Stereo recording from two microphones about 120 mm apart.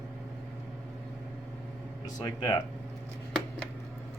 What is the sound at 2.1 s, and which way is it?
Speech, 35° left (ahead or behind).